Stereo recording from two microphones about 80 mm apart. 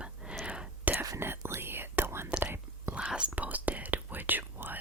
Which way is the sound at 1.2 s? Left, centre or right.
Right.